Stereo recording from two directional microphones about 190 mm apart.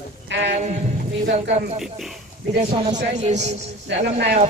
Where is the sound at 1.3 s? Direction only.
40° right (ahead or behind).